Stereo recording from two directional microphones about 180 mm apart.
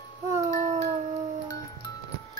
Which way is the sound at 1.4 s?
20° left (ahead or behind).